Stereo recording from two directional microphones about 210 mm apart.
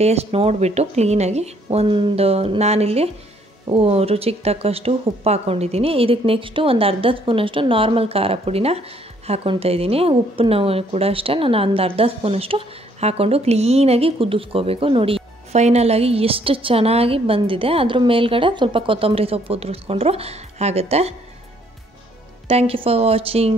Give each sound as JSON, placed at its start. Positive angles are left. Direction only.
{"t": 0.0, "sound": "speech", "side_deg": -30}
{"t": 22.5, "sound": "speech", "side_deg": -25}